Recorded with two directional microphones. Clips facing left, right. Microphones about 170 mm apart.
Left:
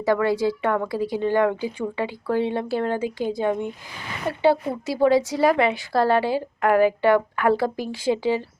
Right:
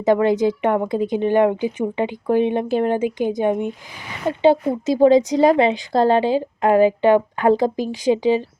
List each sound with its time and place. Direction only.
0.0 s a woman's voice: 20° right (ahead or behind)